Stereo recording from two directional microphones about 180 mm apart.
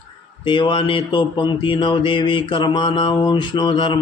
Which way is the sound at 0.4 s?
25° left (ahead or behind).